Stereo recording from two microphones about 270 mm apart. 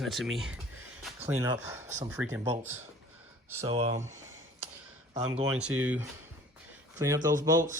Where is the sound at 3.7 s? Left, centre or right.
Right.